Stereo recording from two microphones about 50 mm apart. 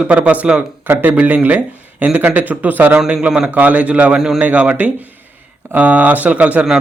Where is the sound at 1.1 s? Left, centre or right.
Right.